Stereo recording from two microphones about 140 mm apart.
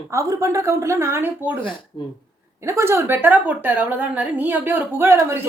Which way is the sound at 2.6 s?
20° right (ahead or behind).